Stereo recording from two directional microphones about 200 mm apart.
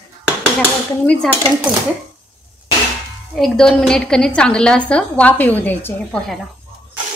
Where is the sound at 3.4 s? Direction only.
5° left (ahead or behind).